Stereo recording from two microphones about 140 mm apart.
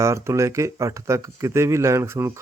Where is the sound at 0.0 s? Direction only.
20° right (ahead or behind).